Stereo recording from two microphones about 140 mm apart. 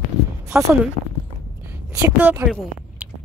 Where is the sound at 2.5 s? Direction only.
5° right (ahead or behind).